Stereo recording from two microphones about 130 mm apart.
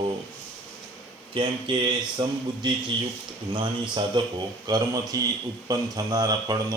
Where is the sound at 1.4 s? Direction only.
40° right (ahead or behind).